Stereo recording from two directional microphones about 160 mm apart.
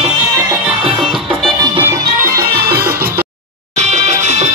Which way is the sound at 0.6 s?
5° right (ahead or behind).